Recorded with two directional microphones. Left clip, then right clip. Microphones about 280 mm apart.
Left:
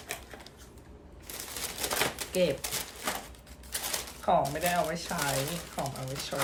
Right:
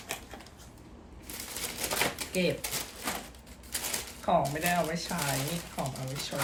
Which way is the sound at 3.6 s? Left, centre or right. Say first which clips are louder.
Left 1 dB; centre.